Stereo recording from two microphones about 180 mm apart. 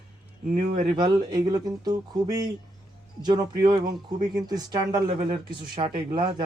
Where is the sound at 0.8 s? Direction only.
30° right (ahead or behind).